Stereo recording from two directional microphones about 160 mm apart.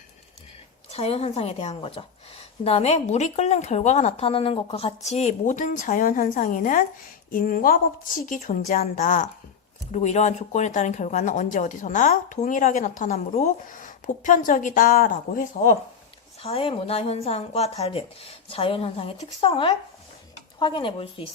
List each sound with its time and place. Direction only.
0.9 s a woman's voice: 40° left (ahead or behind); by 15.8 s 55° left (ahead or behind)
16.4 s speech: 35° left (ahead or behind)